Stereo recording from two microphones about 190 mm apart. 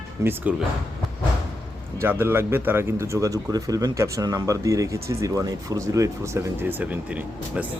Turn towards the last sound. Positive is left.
turn(degrees=-5)  # may be behind; listen again after turning